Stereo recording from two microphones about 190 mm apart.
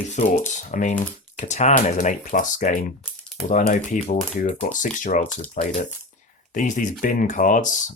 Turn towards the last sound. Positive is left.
turn(degrees=45)  # may be behind; listen again after turning